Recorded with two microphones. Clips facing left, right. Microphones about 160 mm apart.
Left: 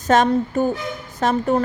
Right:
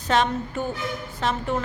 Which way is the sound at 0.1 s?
45° left (ahead or behind).